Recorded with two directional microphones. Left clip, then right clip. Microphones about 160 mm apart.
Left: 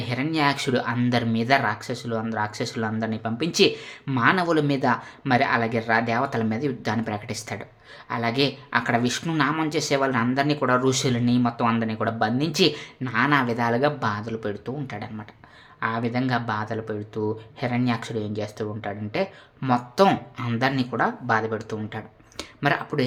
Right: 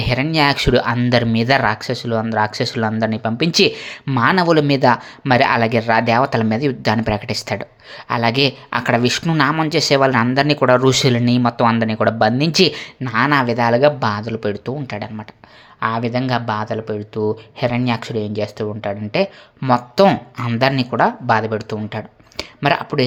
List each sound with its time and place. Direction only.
0.0 s speech: 35° right (ahead or behind)